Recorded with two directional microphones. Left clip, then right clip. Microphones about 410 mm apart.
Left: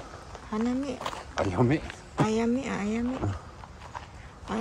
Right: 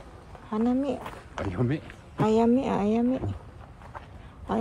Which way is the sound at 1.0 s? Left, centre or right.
Centre.